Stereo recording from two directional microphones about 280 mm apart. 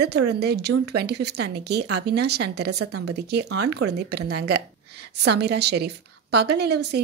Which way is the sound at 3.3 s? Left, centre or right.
Right.